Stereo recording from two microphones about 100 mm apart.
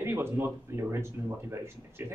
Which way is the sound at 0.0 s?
25° right (ahead or behind).